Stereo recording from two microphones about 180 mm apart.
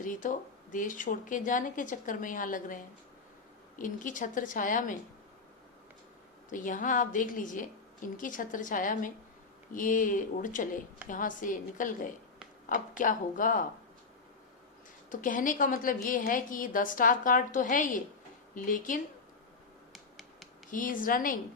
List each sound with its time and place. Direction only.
0.0 s a woman's voice: 45° left (ahead or behind)
6.5 s a woman's voice: 45° left (ahead or behind)
13.0 s a woman's voice: 45° left (ahead or behind)
15.1 s a woman's voice: 45° left (ahead or behind)
19.9 s finger snapping: centre (ahead or behind)
20.7 s a woman's voice: 50° left (ahead or behind)